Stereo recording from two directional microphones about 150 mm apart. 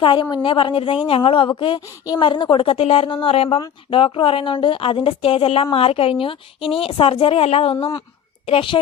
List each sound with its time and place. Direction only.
0.0 s a woman's voice: 30° left (ahead or behind)